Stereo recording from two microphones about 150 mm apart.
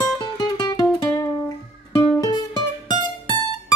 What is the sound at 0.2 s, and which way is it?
Music, 25° left (ahead or behind).